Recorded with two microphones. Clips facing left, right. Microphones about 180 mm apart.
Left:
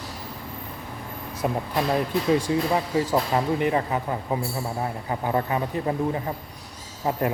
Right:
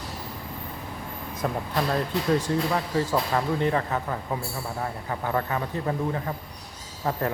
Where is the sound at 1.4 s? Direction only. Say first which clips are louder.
Left 2 dB; 15° left (ahead or behind).